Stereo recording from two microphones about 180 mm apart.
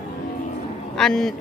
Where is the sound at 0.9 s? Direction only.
5° left (ahead or behind).